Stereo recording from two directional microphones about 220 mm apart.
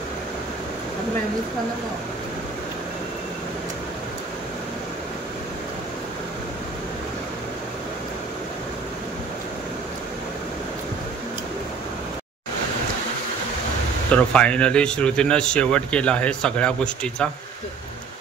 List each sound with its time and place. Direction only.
14.1 s speech: 5° left (ahead or behind)